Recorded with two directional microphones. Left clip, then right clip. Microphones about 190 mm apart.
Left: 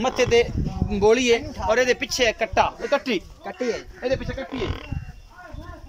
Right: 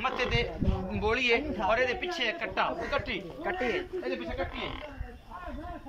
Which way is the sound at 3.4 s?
20° left (ahead or behind).